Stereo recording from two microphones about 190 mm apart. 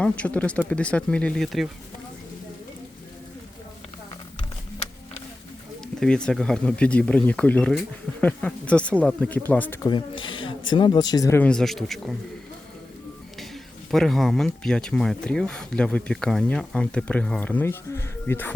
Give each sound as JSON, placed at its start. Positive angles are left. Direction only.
{"t": 0.0, "sound": "speech", "side_deg": 5}
{"t": 5.8, "sound": "speech", "side_deg": 5}
{"t": 9.8, "sound": "a man's voice", "side_deg": 25}
{"t": 13.9, "sound": "speech", "side_deg": 0}